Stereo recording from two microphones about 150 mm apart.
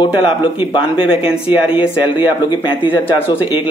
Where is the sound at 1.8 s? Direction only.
10° right (ahead or behind).